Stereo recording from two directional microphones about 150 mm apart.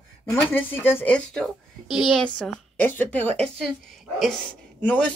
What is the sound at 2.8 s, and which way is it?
Speech, 10° left (ahead or behind).